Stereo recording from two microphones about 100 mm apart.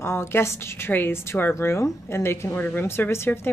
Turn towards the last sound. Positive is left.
turn(degrees=20)  # may be behind; listen again after turning